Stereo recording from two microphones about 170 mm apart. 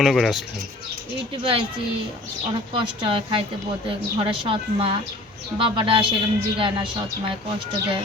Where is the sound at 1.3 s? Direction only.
30° right (ahead or behind).